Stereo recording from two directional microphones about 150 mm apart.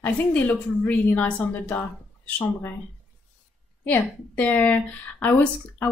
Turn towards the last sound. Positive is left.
turn(degrees=10)  # may be behind; listen again after turning